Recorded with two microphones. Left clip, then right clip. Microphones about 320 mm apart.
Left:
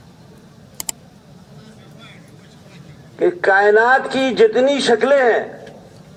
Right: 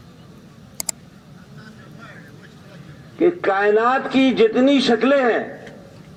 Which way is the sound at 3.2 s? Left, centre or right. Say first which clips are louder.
Left 4 dB; left.